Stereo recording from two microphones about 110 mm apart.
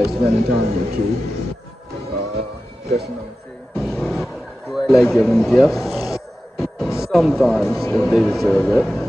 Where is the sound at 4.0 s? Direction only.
Centre (ahead or behind).